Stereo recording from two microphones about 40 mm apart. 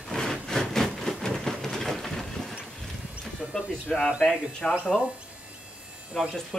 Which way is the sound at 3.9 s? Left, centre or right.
Centre.